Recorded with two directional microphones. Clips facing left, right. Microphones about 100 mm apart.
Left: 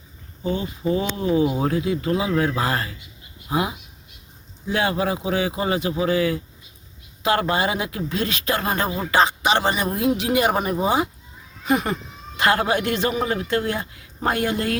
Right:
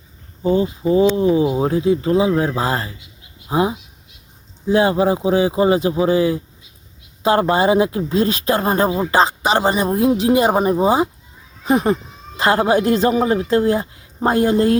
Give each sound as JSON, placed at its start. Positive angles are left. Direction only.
{"t": 0.4, "sound": "a man's voice", "side_deg": -35}